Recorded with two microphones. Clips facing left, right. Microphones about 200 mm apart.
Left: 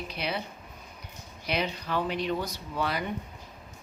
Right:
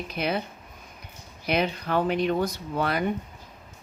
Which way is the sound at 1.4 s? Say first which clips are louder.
Right 5 dB; 55° right (ahead or behind).